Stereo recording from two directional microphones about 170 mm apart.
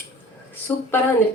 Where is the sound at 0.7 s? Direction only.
10° left (ahead or behind).